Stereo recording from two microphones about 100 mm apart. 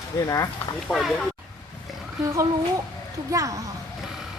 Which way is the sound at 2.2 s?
35° right (ahead or behind).